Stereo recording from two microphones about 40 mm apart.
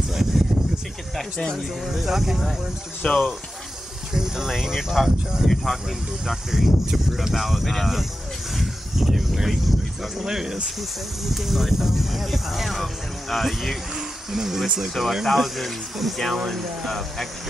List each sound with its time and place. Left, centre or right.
0.1 s a sound: centre
1.1 s speech: centre
1.9 s speech: centre
3.0 s speech: left
4.1 s speech: centre
8.5 s a sound: centre
10.1 s speech: centre
13.9 s speech: centre